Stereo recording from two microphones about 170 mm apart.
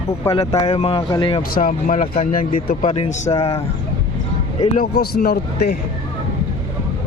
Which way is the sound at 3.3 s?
25° left (ahead or behind).